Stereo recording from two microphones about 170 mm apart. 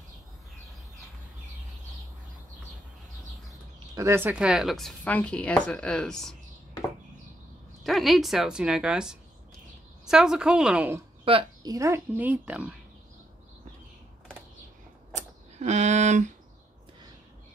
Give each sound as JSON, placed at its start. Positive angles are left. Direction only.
{"t": 3.9, "sound": "speech", "side_deg": -15}
{"t": 7.8, "sound": "speech", "side_deg": 0}
{"t": 11.2, "sound": "speech", "side_deg": -30}
{"t": 11.7, "sound": "a woman's voice", "side_deg": -15}
{"t": 15.1, "sound": "a sound", "side_deg": -40}